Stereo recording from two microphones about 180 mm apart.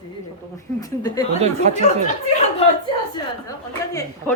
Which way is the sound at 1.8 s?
40° left (ahead or behind).